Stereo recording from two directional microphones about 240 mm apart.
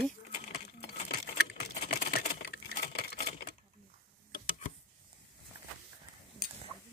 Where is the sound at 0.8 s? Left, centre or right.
Left.